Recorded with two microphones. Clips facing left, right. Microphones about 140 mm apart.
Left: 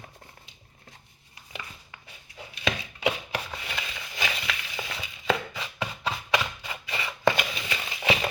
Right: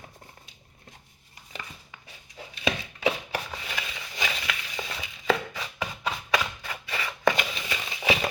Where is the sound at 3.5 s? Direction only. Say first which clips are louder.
Even; centre (ahead or behind).